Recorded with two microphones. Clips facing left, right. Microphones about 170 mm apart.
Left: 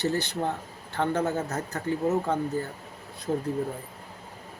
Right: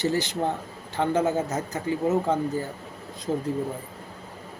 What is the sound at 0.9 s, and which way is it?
Speech, 15° right (ahead or behind).